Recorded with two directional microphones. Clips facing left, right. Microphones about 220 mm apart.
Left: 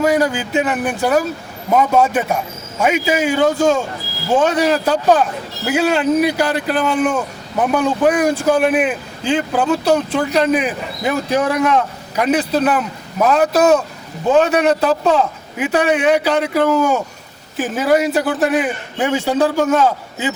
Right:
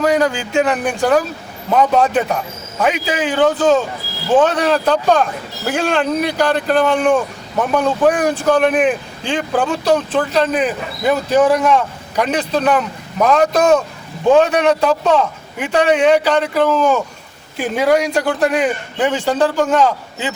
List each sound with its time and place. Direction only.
0.0 s a man's voice: 10° left (ahead or behind)